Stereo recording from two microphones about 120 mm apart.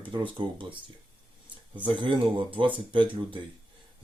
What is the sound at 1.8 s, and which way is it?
Speech, 45° right (ahead or behind).